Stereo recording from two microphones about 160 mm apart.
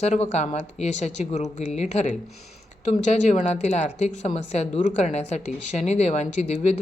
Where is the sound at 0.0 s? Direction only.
45° left (ahead or behind).